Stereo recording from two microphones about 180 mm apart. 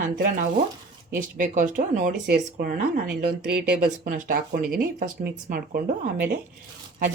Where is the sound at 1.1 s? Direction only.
45° right (ahead or behind).